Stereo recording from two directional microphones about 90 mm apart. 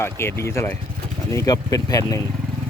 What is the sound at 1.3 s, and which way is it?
Speech, 45° left (ahead or behind).